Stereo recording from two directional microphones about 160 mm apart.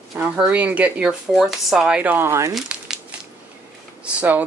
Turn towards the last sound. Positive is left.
turn(degrees=-10)  # may be behind; listen again after turning